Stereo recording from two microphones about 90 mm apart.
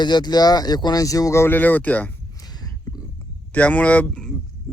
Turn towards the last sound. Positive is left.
turn(degrees=0)  # may be behind; listen again after turning